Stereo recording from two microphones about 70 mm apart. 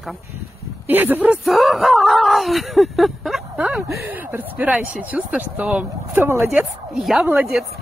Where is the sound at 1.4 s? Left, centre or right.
Centre.